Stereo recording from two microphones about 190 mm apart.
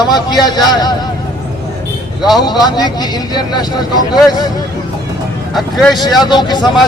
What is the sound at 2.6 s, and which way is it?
Speech, 20° left (ahead or behind).